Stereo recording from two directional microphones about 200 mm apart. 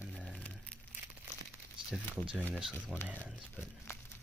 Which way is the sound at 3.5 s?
10° left (ahead or behind).